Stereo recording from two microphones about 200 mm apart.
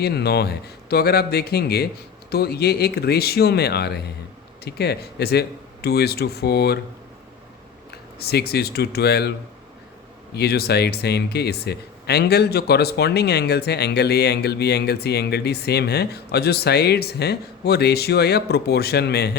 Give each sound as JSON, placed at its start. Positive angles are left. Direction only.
{"t": 0.0, "sound": "speech", "side_deg": 55}
{"t": 7.9, "sound": "speech", "side_deg": 55}
{"t": 10.3, "sound": "speech", "side_deg": 50}